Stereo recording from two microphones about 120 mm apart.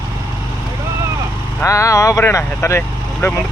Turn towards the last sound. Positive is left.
turn(degrees=20)  # may be behind; listen again after turning